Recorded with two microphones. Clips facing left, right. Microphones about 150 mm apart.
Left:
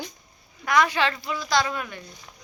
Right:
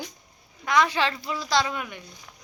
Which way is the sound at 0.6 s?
25° right (ahead or behind).